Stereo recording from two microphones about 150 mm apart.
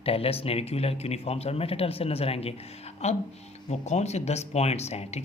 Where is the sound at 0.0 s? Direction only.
40° left (ahead or behind).